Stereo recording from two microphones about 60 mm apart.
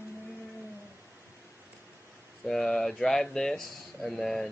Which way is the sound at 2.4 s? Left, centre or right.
Centre.